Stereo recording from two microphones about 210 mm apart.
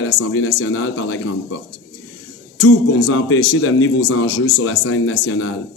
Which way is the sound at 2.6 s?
65° left (ahead or behind).